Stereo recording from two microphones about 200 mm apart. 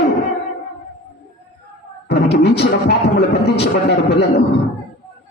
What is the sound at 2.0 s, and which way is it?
Music, 55° left (ahead or behind).